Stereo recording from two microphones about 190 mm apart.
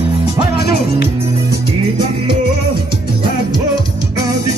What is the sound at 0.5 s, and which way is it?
Music, 55° left (ahead or behind).